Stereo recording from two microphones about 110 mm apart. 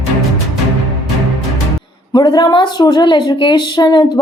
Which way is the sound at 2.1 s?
40° left (ahead or behind).